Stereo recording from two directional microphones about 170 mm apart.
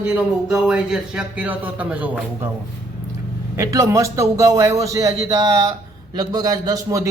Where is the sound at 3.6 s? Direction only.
20° right (ahead or behind).